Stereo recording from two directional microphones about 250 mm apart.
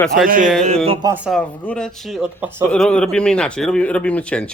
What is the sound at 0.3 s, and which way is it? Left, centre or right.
Speech, right.